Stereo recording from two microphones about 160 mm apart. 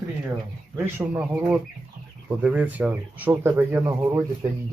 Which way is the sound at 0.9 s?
10° right (ahead or behind).